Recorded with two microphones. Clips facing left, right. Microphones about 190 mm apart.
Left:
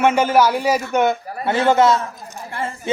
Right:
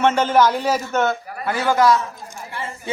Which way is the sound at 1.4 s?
25° left (ahead or behind).